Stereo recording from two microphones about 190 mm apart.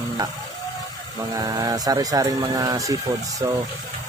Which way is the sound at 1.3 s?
20° right (ahead or behind).